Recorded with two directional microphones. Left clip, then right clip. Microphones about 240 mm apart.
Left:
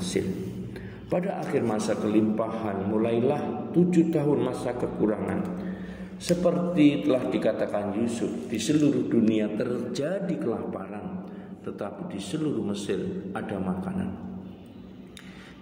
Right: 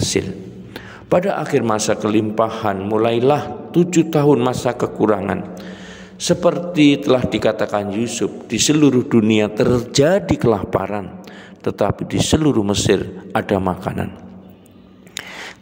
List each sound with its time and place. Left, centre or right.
0.2 s a man's voice: right